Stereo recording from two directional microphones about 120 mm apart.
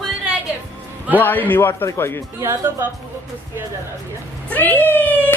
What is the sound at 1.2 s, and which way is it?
A man's voice, 15° left (ahead or behind).